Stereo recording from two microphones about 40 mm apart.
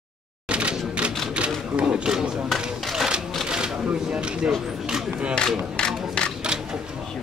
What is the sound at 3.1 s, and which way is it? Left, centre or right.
Typewriter, right.